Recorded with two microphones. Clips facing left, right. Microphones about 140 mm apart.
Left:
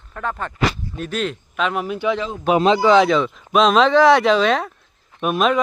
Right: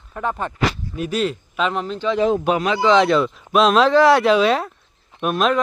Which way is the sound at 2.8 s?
Centre (ahead or behind).